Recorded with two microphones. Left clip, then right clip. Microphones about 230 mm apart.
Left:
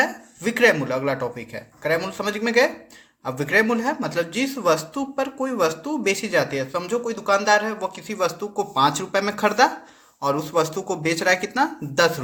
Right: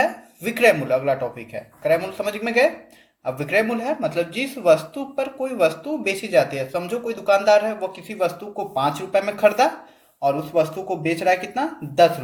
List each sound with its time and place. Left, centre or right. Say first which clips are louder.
0.4 s speech: right 1 dB; left